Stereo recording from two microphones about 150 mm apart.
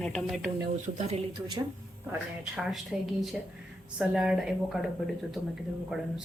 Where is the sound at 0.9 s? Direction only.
45° right (ahead or behind).